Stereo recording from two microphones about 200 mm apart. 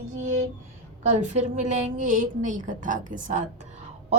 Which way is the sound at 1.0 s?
35° right (ahead or behind).